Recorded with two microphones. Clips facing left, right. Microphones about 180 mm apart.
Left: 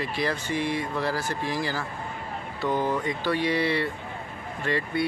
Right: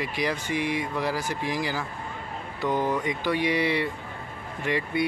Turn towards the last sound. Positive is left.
turn(degrees=-15)  # may be behind; listen again after turning